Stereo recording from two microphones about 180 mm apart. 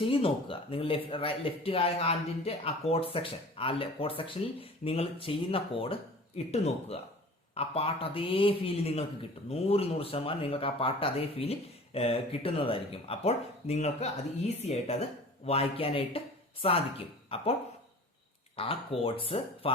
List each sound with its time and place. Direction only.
0.0 s speech: 30° left (ahead or behind)
18.5 s speech: 30° left (ahead or behind)